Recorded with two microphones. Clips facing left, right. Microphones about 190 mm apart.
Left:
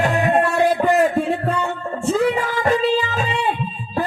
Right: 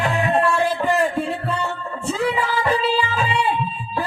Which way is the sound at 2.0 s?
45° left (ahead or behind).